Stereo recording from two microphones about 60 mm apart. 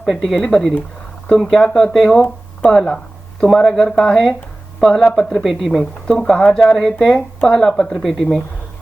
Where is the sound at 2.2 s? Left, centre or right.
Centre.